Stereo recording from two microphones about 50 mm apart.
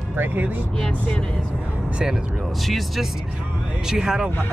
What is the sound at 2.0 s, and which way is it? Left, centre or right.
Speech, centre.